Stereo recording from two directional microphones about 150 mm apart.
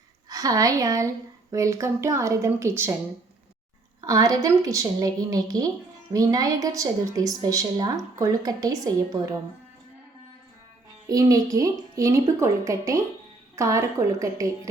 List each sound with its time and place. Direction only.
0.3 s a woman's voice: 25° right (ahead or behind)
4.0 s a woman's voice: 25° right (ahead or behind)
11.1 s a woman's voice: 20° right (ahead or behind)